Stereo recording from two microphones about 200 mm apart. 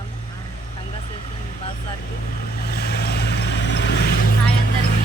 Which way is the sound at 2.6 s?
55° left (ahead or behind).